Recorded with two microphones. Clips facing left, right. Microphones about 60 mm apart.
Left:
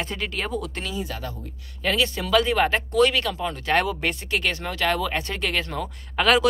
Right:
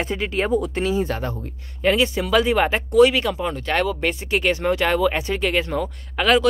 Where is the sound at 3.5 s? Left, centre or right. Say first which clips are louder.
Right 1 dB; centre.